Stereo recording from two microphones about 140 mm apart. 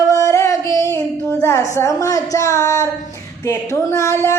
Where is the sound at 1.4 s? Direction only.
20° left (ahead or behind).